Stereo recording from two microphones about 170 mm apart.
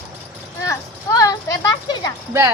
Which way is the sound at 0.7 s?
20° left (ahead or behind).